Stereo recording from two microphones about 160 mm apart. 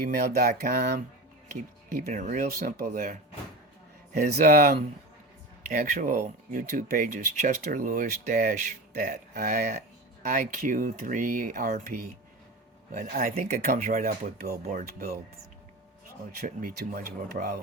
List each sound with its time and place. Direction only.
0.0 s a sound: 70° right (ahead or behind)
1.9 s speech: 50° right (ahead or behind)
2.5 s speech: 70° right (ahead or behind)
16.6 s speech: 60° right (ahead or behind)